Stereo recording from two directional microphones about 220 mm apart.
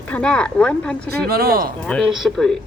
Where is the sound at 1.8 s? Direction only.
5° left (ahead or behind).